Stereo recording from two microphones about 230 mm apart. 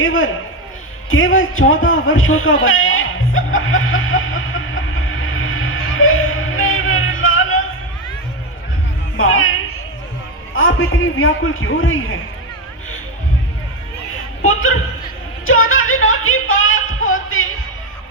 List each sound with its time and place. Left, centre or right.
0.0 s a man's voice: left
1.1 s a sound: left
9.1 s music: left
10.5 s a man's voice: left
14.4 s a man's voice: left
15.4 s music: left